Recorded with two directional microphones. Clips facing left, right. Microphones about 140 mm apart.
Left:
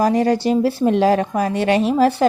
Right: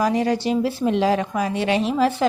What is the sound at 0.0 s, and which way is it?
A woman's voice, 45° left (ahead or behind).